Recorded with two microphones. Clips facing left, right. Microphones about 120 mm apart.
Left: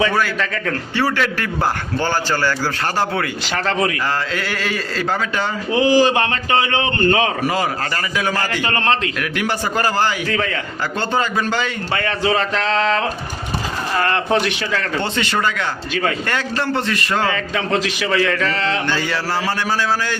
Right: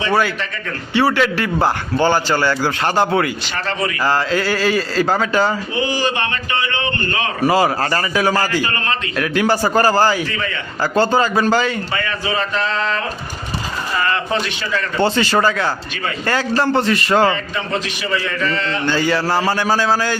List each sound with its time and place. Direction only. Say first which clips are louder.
0.9 s a man's voice: right 5 dB; 15° right (ahead or behind)
3.5 s a man's voice: left 3 dB; 75° left (ahead or behind)
4.0 s a man's voice: right 5 dB; 30° right (ahead or behind)
5.7 s speech: left 6 dB; 90° left
7.4 s a man's voice: right 5 dB; 35° right (ahead or behind)
10.2 s a man's voice: left 3 dB; 75° left (ahead or behind)
10.9 s a man's voice: right 5 dB; 35° right (ahead or behind)
11.9 s speech: left 3 dB; 60° left (ahead or behind); by 13.0 s 90° left
14.0 s a man's voice: left 3 dB; 65° left (ahead or behind)
15.0 s a man's voice: right 5 dB; 35° right (ahead or behind)
17.3 s a man's voice: left 2 dB; 90° left
18.9 s a man's voice: right 4 dB; 30° right (ahead or behind)